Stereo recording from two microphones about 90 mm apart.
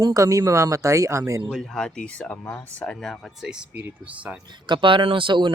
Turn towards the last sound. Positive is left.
turn(degrees=-65)  # may be behind; listen again after turning